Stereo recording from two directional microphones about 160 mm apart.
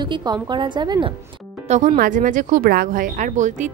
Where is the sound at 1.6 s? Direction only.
50° right (ahead or behind).